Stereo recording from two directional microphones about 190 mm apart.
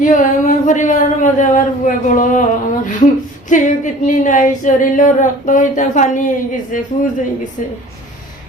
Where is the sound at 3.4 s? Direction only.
40° left (ahead or behind).